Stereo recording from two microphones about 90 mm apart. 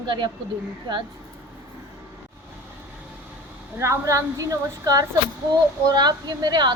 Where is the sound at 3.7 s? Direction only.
35° right (ahead or behind).